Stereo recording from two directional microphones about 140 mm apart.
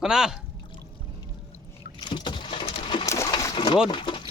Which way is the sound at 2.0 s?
30° left (ahead or behind).